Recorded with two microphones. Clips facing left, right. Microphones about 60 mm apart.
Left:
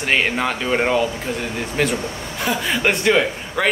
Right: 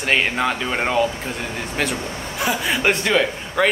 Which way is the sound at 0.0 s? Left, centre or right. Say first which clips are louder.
Even; centre.